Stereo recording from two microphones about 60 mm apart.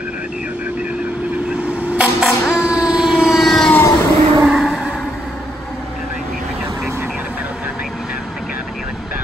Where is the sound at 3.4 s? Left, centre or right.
Centre.